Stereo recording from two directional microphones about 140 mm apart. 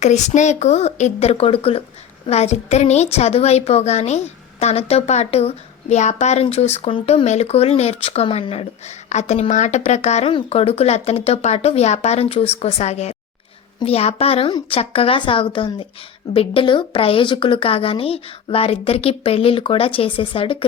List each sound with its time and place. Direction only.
0.0 s a woman's voice: 55° left (ahead or behind)
9.0 s a woman's voice: 55° left (ahead or behind)